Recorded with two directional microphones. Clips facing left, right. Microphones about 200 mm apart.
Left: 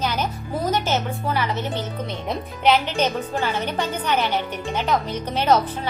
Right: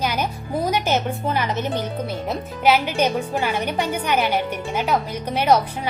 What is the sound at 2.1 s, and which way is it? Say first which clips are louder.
A woman's voice: right 2 dB; 5° right (ahead or behind).